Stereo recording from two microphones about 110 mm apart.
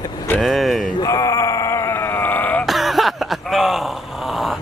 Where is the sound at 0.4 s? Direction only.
Centre (ahead or behind).